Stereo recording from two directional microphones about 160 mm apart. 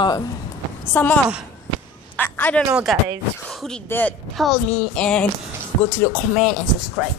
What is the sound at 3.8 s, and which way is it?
A woman's voice, 15° left (ahead or behind).